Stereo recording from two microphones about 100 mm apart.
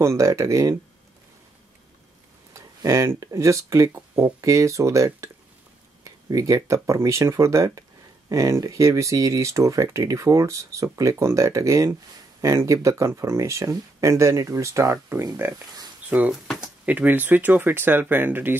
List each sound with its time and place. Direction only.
0.0 s speech: 30° right (ahead or behind)
2.5 s speech: 30° right (ahead or behind)
15.5 s speech: 40° right (ahead or behind)
16.1 s speech: 15° right (ahead or behind)